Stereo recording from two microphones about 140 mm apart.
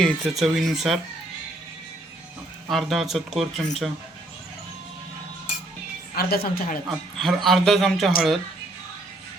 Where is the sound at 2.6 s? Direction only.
Centre (ahead or behind).